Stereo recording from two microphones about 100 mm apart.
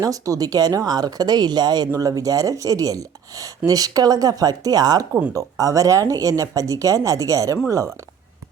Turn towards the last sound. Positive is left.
turn(degrees=-30)  # may be behind; listen again after turning